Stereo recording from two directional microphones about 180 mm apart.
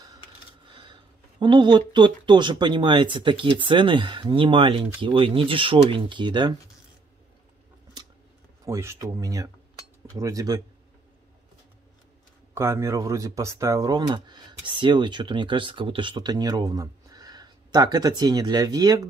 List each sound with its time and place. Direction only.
0.7 s a sound: 25° right (ahead or behind)
1.4 s speech: 25° right (ahead or behind)
8.6 s speech: 15° right (ahead or behind)
12.5 s speech: 15° right (ahead or behind)